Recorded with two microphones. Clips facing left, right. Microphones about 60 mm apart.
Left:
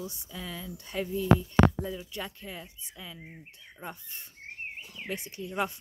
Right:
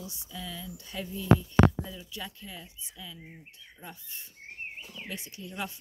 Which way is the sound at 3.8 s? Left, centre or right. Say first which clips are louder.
Left 4 dB; left.